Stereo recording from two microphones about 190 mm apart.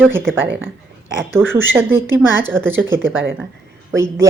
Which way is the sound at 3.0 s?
90° right.